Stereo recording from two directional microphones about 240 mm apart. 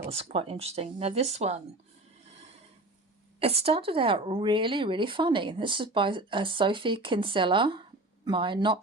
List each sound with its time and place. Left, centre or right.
0.1 s speech: right
3.4 s speech: right